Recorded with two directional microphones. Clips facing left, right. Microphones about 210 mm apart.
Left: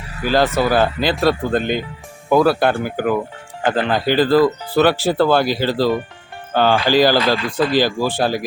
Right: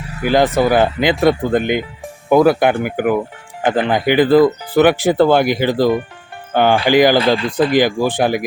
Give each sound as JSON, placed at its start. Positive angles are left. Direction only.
{"t": 0.2, "sound": "speech", "side_deg": -20}